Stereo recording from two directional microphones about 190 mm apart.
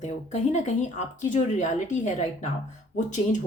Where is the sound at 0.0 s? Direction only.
40° left (ahead or behind).